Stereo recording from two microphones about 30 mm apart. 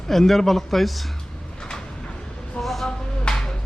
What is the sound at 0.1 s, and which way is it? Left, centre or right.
Speech, centre.